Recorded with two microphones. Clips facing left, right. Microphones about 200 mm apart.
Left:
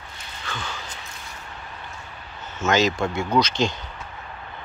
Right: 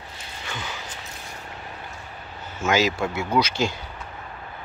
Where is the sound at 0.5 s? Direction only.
15° right (ahead or behind).